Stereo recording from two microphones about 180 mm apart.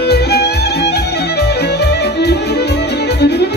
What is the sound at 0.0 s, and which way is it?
Music, 65° left (ahead or behind).